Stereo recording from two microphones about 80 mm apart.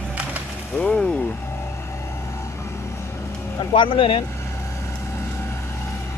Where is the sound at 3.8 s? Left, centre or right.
Left.